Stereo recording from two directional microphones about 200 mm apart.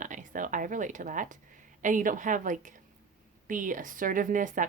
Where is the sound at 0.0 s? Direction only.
40° right (ahead or behind).